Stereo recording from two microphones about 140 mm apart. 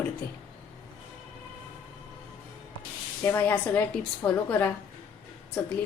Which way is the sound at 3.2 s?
15° left (ahead or behind).